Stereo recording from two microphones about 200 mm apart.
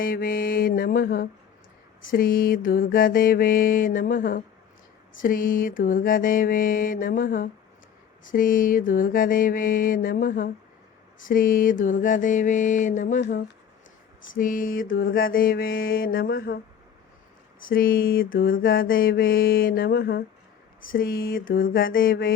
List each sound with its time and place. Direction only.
0.0 s mantra: 45° left (ahead or behind)
14.3 s mantra: 45° left (ahead or behind)
17.6 s mantra: 45° left (ahead or behind)